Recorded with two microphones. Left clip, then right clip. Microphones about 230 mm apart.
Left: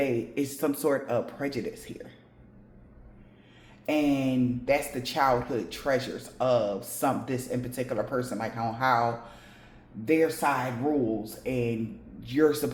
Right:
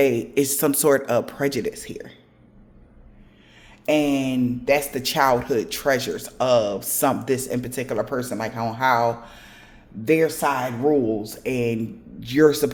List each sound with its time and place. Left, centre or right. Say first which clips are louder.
0.0 s speech: right 9 dB; right
3.8 s speech: right 6 dB; right